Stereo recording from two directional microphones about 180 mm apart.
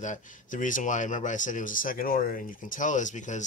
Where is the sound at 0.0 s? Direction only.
45° left (ahead or behind).